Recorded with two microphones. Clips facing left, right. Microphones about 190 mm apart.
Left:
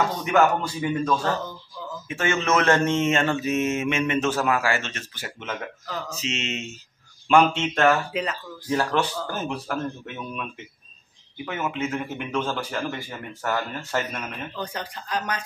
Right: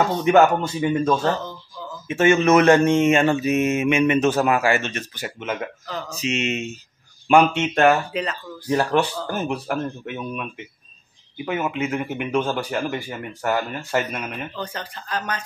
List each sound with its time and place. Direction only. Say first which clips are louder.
0.1 s a man's voice: right 5 dB; 25° right (ahead or behind)
8.1 s speech: right 1 dB; 10° left (ahead or behind)
8.6 s speech: right 4 dB; 15° right (ahead or behind)
11.4 s speech: right 4 dB; 15° right (ahead or behind)
14.5 s speech: right 1 dB; 10° left (ahead or behind)